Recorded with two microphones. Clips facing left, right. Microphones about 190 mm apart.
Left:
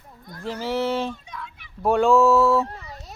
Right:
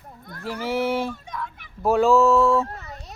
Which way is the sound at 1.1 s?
50° right (ahead or behind).